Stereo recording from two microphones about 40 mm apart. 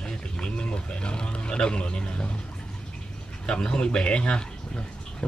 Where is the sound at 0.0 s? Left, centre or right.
Left.